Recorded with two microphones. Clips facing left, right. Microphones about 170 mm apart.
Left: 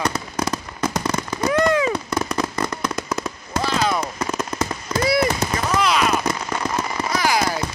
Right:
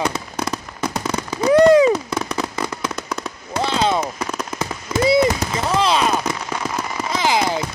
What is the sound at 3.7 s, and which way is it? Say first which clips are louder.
Fireworks: right 3 dB; 25° right (ahead or behind).